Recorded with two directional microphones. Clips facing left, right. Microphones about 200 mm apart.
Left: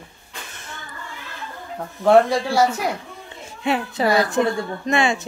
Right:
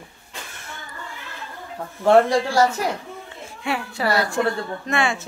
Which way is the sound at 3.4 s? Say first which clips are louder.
Left 4 dB; 20° left (ahead or behind).